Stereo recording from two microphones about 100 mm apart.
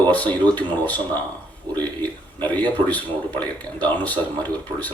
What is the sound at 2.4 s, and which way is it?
Speech, 15° left (ahead or behind).